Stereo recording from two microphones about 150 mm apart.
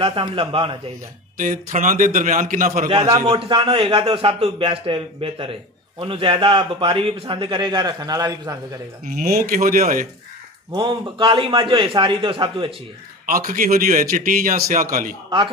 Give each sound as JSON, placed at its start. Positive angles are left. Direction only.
{"t": 0.0, "sound": "a man's voice", "side_deg": -35}
{"t": 1.4, "sound": "a man's voice", "side_deg": -60}
{"t": 3.1, "sound": "a man's voice", "side_deg": -25}
{"t": 3.3, "sound": "a man's voice", "side_deg": -35}
{"t": 9.0, "sound": "speech", "side_deg": -75}
{"t": 10.7, "sound": "a man's voice", "side_deg": -30}
{"t": 13.3, "sound": "a man's voice", "side_deg": -60}